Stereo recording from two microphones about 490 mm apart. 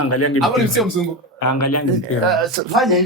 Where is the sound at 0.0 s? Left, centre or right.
Left.